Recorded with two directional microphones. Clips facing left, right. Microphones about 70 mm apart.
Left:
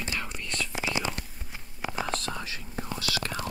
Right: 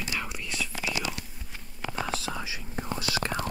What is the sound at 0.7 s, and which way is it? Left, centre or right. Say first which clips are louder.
Whispering: left 2 dB; left.